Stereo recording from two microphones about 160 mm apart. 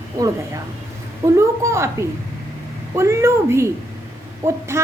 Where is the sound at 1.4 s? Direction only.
15° right (ahead or behind).